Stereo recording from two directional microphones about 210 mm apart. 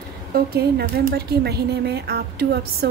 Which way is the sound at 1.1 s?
50° right (ahead or behind).